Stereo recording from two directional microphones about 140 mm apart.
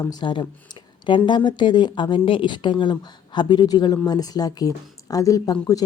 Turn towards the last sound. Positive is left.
turn(degrees=25)  # may be behind; listen again after turning